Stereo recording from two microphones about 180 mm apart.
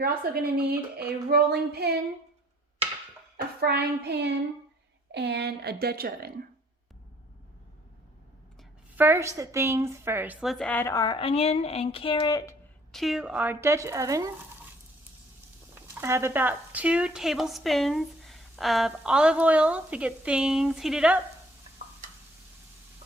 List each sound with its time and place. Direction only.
0.0 s a woman's voice: 55° right (ahead or behind)
3.6 s a sound: 65° right (ahead or behind)
5.1 s a woman's voice: 70° right (ahead or behind)
9.0 s a woman's voice: 15° right (ahead or behind)
10.4 s speech: centre (ahead or behind); by 12.5 s 20° left (ahead or behind)
12.9 s a woman's voice: centre (ahead or behind); by 14.3 s 15° right (ahead or behind)
15.7 s speech: 15° right (ahead or behind)